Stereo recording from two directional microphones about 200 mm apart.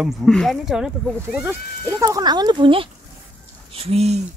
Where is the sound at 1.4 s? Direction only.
10° right (ahead or behind); by 4.2 s 30° right (ahead or behind).